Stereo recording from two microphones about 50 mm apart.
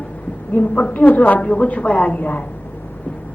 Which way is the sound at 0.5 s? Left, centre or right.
Left.